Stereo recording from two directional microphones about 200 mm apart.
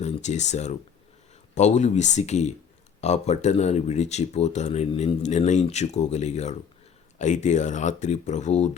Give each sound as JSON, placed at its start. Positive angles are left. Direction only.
{"t": 0.0, "sound": "speech", "side_deg": 35}